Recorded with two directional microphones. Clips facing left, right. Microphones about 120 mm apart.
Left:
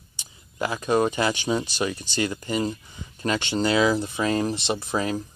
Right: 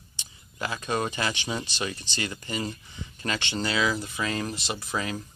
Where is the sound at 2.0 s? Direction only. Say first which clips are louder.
Left 7 dB; 40° left (ahead or behind).